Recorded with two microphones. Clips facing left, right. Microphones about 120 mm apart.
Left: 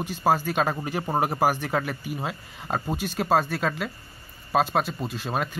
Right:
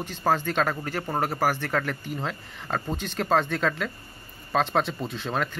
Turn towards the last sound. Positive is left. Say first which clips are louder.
# even
turn(degrees=5)  # may be behind; listen again after turning